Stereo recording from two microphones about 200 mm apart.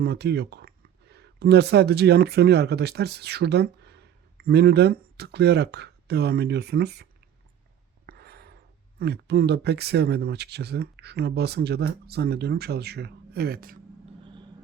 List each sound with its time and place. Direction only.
0.0 s speech: 55° right (ahead or behind)
8.0 s a sound: 50° right (ahead or behind)
9.0 s speech: 55° right (ahead or behind)